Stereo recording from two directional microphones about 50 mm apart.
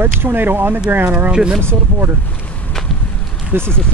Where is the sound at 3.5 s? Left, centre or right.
Right.